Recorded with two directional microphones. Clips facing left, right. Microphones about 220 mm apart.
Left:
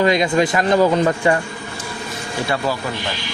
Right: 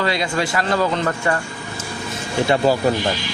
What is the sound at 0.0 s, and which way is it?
Speech, 20° left (ahead or behind).